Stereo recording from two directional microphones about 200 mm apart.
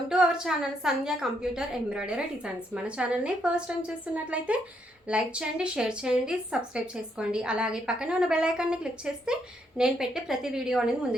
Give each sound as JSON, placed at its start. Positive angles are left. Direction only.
{"t": 0.1, "sound": "a woman's voice", "side_deg": -5}